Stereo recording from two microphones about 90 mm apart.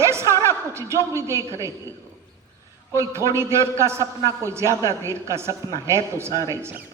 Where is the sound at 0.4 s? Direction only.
30° right (ahead or behind).